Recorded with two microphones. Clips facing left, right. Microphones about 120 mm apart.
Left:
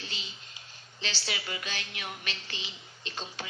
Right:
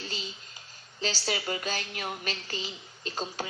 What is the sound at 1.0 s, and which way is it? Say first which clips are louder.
A woman's voice: right 6 dB; 40° right (ahead or behind).